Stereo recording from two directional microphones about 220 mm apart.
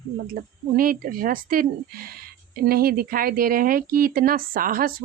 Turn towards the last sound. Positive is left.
turn(degrees=-40)  # may be behind; listen again after turning